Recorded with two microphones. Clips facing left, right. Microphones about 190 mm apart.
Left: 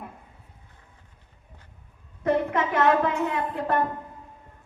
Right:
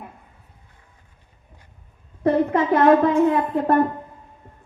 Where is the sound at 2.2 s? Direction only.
35° right (ahead or behind).